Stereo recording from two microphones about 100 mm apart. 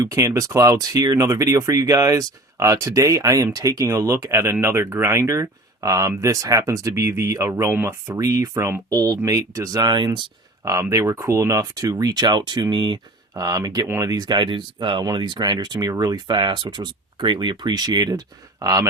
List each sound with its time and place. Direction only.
0.0 s speech: 30° right (ahead or behind)
10.6 s speech: 30° right (ahead or behind)